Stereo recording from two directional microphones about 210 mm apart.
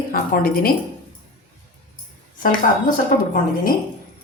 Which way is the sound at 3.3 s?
40° left (ahead or behind).